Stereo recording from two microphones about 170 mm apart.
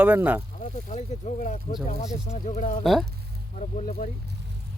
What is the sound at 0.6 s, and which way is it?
Speech, 45° left (ahead or behind).